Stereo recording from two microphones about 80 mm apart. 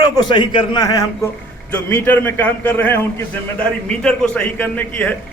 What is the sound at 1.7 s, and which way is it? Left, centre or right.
A man's voice, left.